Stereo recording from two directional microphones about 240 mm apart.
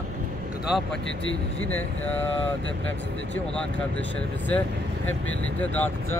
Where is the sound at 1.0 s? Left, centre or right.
Left.